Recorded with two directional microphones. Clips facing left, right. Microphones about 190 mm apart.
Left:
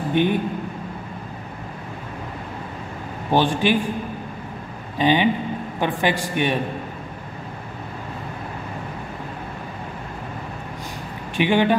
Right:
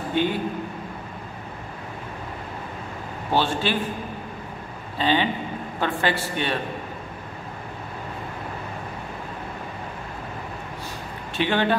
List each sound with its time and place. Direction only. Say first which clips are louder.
0.1 s a man's voice: left 4 dB; 15° left (ahead or behind)
3.3 s a man's voice: left 4 dB; 15° left (ahead or behind)
4.9 s a man's voice: left 4 dB; 15° left (ahead or behind)
11.3 s a man's voice: left 4 dB; 15° left (ahead or behind)